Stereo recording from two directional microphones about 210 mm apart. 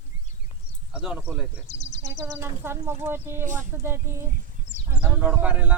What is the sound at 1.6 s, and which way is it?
Speech, 60° left (ahead or behind).